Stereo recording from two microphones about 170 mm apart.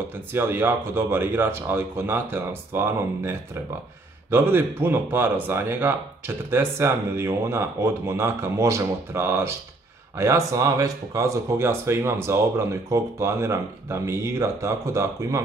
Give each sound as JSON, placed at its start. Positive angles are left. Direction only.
{"t": 0.3, "sound": "speech", "side_deg": -10}